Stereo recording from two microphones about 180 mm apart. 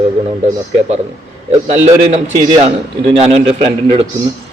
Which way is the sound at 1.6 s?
35° right (ahead or behind).